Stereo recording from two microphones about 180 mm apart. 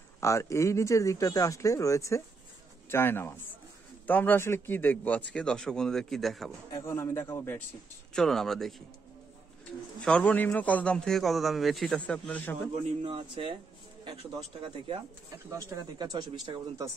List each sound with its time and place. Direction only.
0.2 s a man's voice: 15° left (ahead or behind); by 6.5 s centre (ahead or behind)
6.7 s speech: 15° left (ahead or behind)
8.1 s a man's voice: 5° left (ahead or behind)
10.0 s a man's voice: 5° left (ahead or behind)
13.0 s speech: 30° right (ahead or behind)
15.5 s speech: 25° right (ahead or behind)